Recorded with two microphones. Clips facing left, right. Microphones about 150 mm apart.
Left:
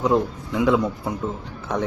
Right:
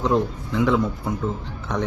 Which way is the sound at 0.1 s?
15° left (ahead or behind).